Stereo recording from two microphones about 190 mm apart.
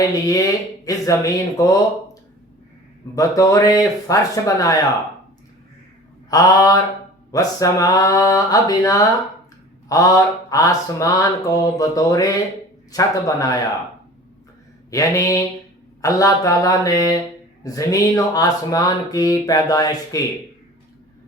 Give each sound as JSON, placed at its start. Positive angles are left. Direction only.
{"t": 0.0, "sound": "speech", "side_deg": 20}
{"t": 0.9, "sound": "mantra", "side_deg": 20}
{"t": 3.2, "sound": "mantra", "side_deg": 20}
{"t": 6.3, "sound": "mantra", "side_deg": 20}
{"t": 14.8, "sound": "mantra", "side_deg": 15}
{"t": 17.6, "sound": "speech", "side_deg": 20}